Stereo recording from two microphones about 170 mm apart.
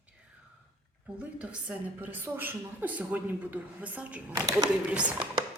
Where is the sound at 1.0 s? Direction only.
5° right (ahead or behind).